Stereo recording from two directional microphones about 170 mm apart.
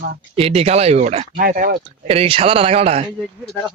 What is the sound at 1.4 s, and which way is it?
Speech, 60° right (ahead or behind).